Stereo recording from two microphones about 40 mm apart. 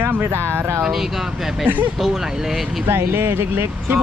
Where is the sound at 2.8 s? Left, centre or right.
Right.